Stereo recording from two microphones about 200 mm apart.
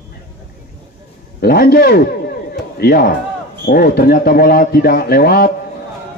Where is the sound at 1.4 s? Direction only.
50° left (ahead or behind).